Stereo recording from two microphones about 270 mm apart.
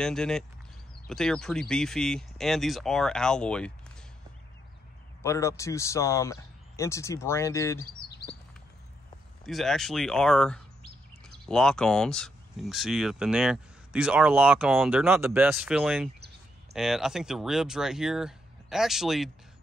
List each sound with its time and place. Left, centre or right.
0.0 s speech: centre
5.2 s speech: centre
8.1 s chirp: left
9.5 s speech: centre